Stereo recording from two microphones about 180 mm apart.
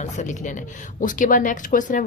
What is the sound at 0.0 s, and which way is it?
Speech, 45° left (ahead or behind).